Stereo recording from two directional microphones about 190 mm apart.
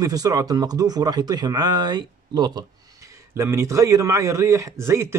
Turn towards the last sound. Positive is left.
turn(degrees=-15)  # may be behind; listen again after turning